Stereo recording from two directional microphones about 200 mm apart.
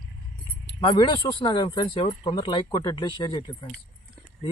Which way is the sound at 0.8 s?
20° left (ahead or behind).